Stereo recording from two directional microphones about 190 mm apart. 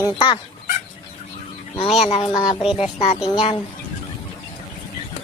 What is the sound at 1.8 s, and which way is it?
Speech, centre (ahead or behind).